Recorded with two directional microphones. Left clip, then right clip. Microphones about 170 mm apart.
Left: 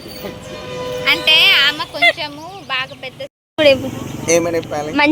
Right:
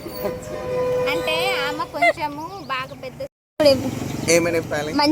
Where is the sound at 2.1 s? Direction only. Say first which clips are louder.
Left 1 dB; 45° right (ahead or behind).